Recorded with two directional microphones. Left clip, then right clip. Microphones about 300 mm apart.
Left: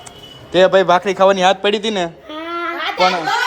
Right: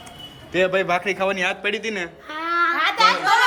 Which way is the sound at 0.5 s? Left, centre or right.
Centre.